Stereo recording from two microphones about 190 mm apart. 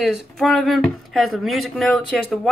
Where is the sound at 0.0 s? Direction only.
Centre (ahead or behind).